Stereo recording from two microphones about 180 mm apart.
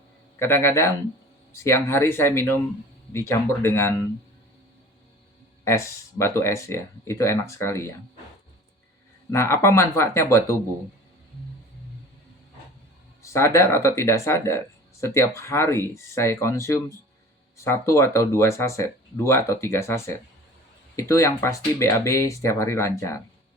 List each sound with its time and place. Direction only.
0.3 s speech: 15° left (ahead or behind)
5.6 s speech: 15° left (ahead or behind)
9.3 s speech: 15° left (ahead or behind)
13.2 s speech: 15° left (ahead or behind)